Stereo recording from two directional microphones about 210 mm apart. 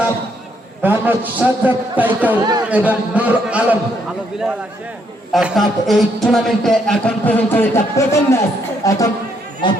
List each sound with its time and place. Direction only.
0.8 s a man's voice: 10° right (ahead or behind)
2.4 s speech: 20° right (ahead or behind)
2.6 s a man's voice: 5° right (ahead or behind)
5.3 s a man's voice: centre (ahead or behind); by 9.8 s 20° left (ahead or behind)